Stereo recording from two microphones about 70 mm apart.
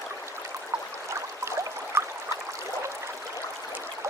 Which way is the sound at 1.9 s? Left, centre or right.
Right.